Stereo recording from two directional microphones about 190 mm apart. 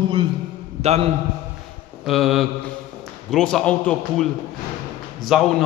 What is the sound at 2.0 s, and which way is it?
A man's voice, centre (ahead or behind).